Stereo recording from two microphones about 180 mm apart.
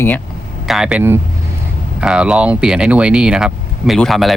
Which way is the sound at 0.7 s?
5° right (ahead or behind).